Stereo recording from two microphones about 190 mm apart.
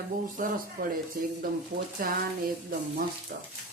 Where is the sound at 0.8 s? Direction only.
50° right (ahead or behind).